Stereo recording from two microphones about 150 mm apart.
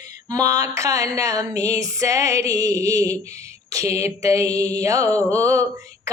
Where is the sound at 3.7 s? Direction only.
20° right (ahead or behind).